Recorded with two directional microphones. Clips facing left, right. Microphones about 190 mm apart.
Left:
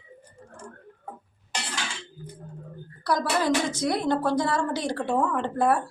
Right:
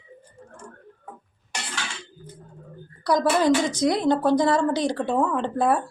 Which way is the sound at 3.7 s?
15° right (ahead or behind).